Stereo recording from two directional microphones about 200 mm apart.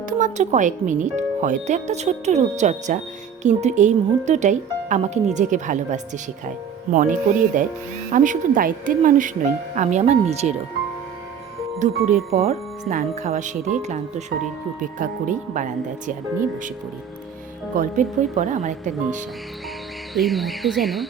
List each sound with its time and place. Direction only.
0.1 s speech: 35° right (ahead or behind)
11.8 s speech: 35° right (ahead or behind)
17.7 s speech: 40° right (ahead or behind)
20.1 s speech: centre (ahead or behind)